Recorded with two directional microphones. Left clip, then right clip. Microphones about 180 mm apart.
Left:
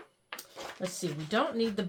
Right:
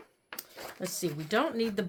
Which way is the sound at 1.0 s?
40° right (ahead or behind).